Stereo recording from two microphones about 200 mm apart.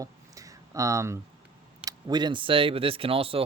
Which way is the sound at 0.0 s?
15° right (ahead or behind).